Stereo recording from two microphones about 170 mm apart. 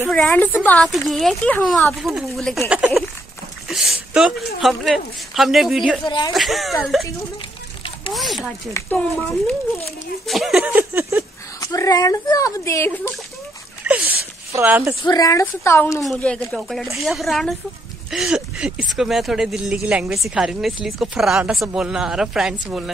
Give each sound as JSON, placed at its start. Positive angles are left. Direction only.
{"t": 0.1, "sound": "speech", "side_deg": 5}
{"t": 3.6, "sound": "a sound", "side_deg": 0}
{"t": 4.6, "sound": "speech", "side_deg": 0}
{"t": 6.0, "sound": "speech", "side_deg": 25}
{"t": 6.3, "sound": "speech", "side_deg": 0}
{"t": 8.1, "sound": "speech", "side_deg": 0}
{"t": 8.7, "sound": "speech", "side_deg": 10}
{"t": 10.2, "sound": "a sound", "side_deg": 0}
{"t": 11.6, "sound": "speech", "side_deg": 20}
{"t": 13.8, "sound": "a sound", "side_deg": -10}
{"t": 15.0, "sound": "speech", "side_deg": 20}
{"t": 16.0, "sound": "speech", "side_deg": 5}